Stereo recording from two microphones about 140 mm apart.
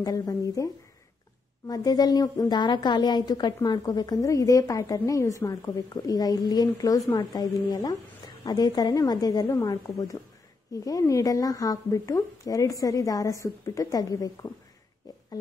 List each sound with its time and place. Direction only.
0.0 s a woman's voice: 25° left (ahead or behind)
1.7 s a woman's voice: 25° left (ahead or behind)
15.1 s a sound: 25° left (ahead or behind)